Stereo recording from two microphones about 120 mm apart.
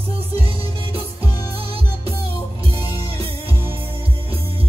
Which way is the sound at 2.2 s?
50° right (ahead or behind).